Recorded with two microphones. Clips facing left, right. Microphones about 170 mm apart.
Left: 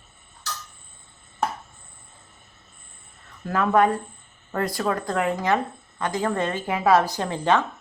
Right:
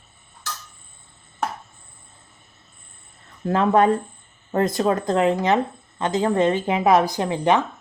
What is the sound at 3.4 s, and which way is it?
Speech, 25° right (ahead or behind).